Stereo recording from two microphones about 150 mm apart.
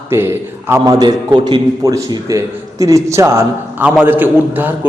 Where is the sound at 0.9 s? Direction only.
25° right (ahead or behind).